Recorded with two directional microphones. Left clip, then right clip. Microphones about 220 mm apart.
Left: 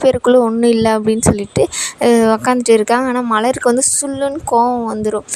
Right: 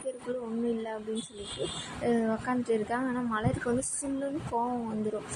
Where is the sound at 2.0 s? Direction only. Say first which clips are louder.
Left 18 dB; 60° left (ahead or behind).